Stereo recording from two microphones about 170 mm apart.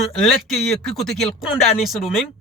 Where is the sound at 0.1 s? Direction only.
Centre (ahead or behind).